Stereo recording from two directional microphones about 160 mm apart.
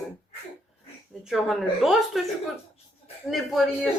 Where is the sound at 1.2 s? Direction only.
Centre (ahead or behind).